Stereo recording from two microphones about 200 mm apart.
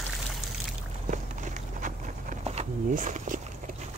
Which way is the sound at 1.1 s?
40° right (ahead or behind).